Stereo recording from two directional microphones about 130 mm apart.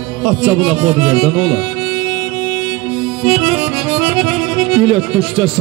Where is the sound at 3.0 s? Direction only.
5° right (ahead or behind).